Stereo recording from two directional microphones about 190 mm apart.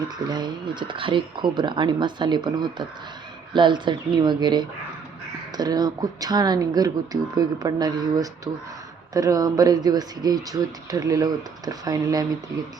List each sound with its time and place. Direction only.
0.3 s speech: 25° right (ahead or behind)